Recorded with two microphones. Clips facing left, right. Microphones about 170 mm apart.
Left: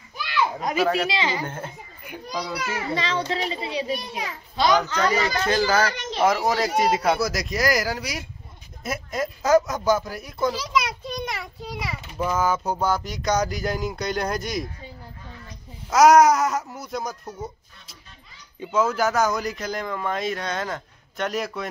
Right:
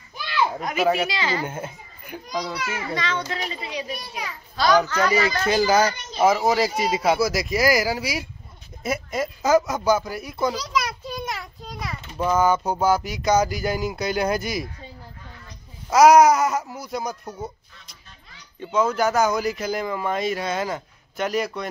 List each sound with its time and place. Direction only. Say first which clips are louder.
0.6 s speech: left 1 dB; 35° left (ahead or behind)
1.1 s a child's voice: even; 20° left (ahead or behind)
1.4 s speech: right 2 dB; 10° right (ahead or behind)
2.5 s a child's voice: left 1 dB; 35° left (ahead or behind); by 5.0 s 20° left (ahead or behind)
5.1 s speech: right 2 dB; 10° right (ahead or behind)
5.9 s a child's voice: left 1 dB; 90° left
6.2 s speech: right 2 dB; 5° right (ahead or behind)
15.9 s speech: right 1 dB; centre (ahead or behind)
17.3 s a sound: right 1 dB; centre (ahead or behind)
18.6 s speech: right 1 dB; 5° left (ahead or behind)